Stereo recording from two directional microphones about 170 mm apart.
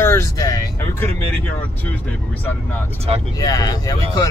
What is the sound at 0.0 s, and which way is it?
Vehicle, 20° left (ahead or behind).